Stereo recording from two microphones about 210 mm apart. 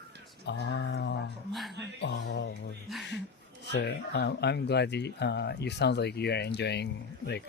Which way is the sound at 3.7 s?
50° left (ahead or behind).